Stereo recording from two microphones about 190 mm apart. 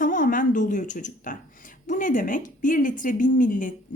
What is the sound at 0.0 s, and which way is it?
A woman's voice, 45° left (ahead or behind).